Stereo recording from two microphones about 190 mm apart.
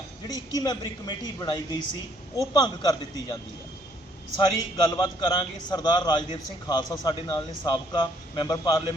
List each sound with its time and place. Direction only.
0.3 s speech: 20° left (ahead or behind)
4.4 s speech: 25° left (ahead or behind)